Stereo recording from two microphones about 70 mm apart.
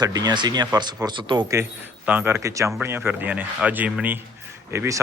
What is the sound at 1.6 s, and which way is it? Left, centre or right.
Speech, right.